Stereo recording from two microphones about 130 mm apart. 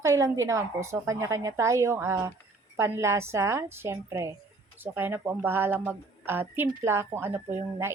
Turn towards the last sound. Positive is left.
turn(degrees=-20)  # may be behind; listen again after turning